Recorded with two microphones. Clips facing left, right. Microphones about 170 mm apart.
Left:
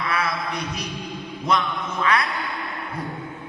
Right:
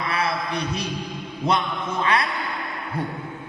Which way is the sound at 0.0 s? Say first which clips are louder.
Even; 30° right (ahead or behind).